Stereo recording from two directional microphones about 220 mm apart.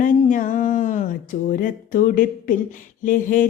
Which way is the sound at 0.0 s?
35° left (ahead or behind).